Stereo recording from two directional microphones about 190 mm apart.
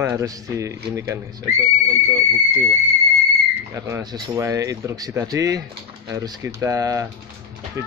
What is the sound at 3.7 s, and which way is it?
Speech, 20° right (ahead or behind).